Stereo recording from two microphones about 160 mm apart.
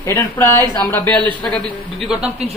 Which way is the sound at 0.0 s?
15° left (ahead or behind).